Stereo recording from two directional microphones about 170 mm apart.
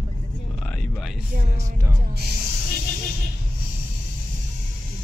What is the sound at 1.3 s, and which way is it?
Speech, 50° right (ahead or behind).